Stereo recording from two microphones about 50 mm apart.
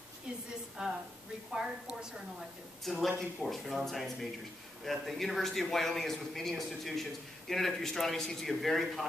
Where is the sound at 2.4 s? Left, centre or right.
Centre.